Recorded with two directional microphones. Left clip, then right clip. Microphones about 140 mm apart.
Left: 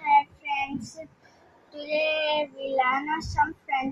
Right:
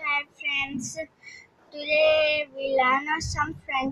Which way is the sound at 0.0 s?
20° right (ahead or behind).